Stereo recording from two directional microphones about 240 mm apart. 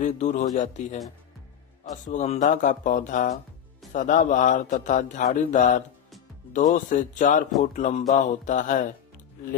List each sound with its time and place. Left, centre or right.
0.0 s a man's voice: left
2.0 s speech: left